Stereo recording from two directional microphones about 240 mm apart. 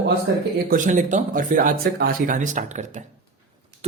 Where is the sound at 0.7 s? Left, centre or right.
Right.